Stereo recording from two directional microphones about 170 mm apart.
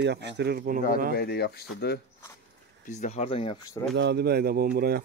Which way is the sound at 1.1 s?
70° left (ahead or behind).